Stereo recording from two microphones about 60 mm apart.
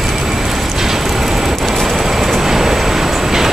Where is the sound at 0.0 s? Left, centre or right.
Centre.